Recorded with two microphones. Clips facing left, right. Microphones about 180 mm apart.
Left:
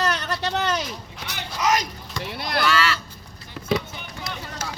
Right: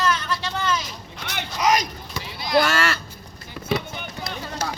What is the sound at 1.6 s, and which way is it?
Speech, 10° right (ahead or behind).